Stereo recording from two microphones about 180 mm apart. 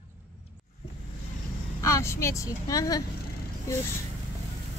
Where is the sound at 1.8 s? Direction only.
15° left (ahead or behind).